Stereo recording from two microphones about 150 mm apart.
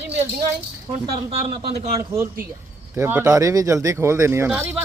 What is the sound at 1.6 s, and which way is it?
Speech, 90° right.